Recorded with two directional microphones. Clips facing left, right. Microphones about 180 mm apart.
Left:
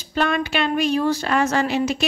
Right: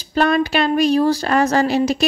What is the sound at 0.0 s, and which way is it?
A woman's voice, 40° right (ahead or behind).